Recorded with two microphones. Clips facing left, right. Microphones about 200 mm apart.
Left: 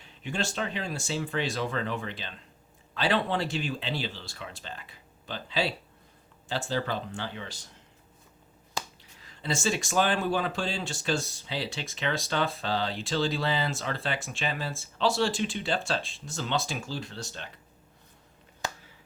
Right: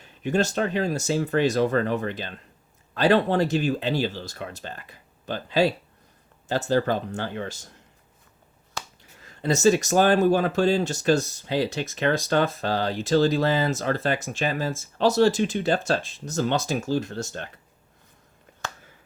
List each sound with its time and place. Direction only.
0.0 s speech: 45° right (ahead or behind)
9.1 s speech: 50° right (ahead or behind)